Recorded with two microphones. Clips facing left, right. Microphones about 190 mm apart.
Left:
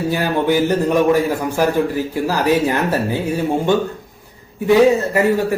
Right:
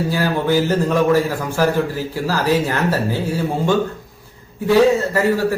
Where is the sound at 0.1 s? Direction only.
20° left (ahead or behind).